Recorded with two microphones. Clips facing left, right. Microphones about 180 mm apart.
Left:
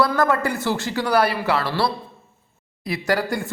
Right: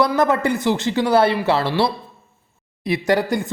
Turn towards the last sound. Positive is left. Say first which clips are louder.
# right 4 dB
turn(degrees=-20)  # may be behind; listen again after turning